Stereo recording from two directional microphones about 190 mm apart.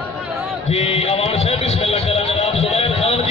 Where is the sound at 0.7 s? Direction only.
30° left (ahead or behind).